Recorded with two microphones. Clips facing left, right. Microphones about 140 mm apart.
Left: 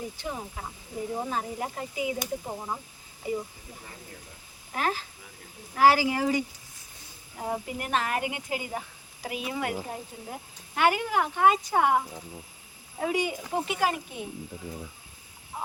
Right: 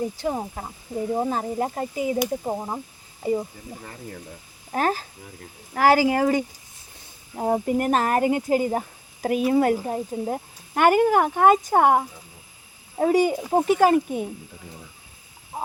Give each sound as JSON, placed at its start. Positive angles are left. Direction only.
{"t": 0.2, "sound": "speech", "side_deg": -45}
{"t": 4.7, "sound": "speech", "side_deg": -45}
{"t": 15.5, "sound": "a sound", "side_deg": -40}